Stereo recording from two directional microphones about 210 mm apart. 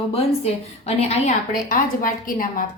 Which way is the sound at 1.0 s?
30° left (ahead or behind).